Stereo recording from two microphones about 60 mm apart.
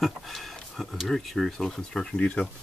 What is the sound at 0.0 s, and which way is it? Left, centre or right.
Speech, centre.